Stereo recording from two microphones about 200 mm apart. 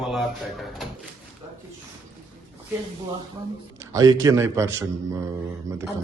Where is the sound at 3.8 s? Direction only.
15° right (ahead or behind).